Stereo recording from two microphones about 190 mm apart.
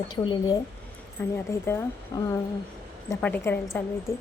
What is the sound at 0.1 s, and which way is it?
A woman's voice, 20° left (ahead or behind).